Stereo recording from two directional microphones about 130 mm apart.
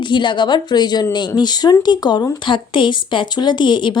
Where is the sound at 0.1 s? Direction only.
35° left (ahead or behind).